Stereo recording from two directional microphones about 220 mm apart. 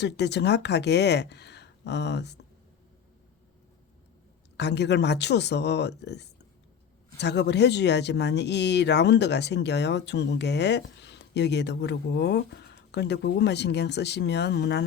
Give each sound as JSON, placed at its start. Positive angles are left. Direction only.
{"t": 0.0, "sound": "speech", "side_deg": 50}
{"t": 4.5, "sound": "speech", "side_deg": 50}